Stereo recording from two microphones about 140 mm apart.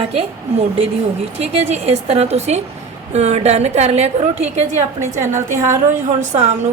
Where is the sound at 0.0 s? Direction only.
45° right (ahead or behind).